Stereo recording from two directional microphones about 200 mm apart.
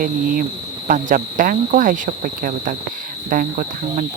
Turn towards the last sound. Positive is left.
turn(degrees=-45)  # may be behind; listen again after turning